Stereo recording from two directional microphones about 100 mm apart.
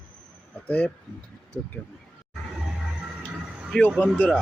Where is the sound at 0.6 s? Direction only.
15° left (ahead or behind).